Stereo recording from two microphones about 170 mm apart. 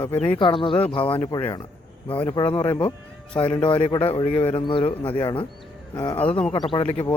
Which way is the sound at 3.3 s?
30° left (ahead or behind).